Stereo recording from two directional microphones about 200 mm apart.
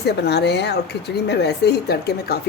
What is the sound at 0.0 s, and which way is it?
A woman's voice, 55° left (ahead or behind).